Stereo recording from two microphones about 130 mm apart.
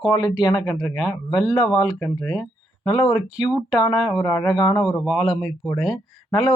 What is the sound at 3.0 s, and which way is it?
Speech, centre (ahead or behind).